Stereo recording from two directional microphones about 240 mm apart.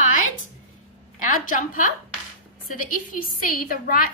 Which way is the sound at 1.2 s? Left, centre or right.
Left.